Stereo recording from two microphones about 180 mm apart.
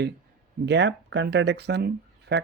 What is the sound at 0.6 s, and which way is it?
Speech, 80° right.